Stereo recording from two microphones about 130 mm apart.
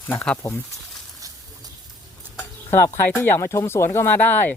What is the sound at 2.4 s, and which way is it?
Speech, 20° left (ahead or behind).